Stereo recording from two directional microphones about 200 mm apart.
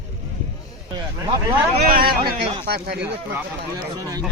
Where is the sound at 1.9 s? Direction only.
50° right (ahead or behind).